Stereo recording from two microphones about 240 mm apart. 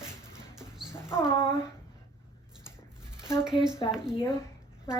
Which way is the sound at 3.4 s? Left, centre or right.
Centre.